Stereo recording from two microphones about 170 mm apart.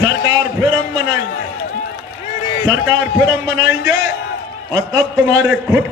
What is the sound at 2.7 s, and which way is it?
A man's voice, 20° right (ahead or behind).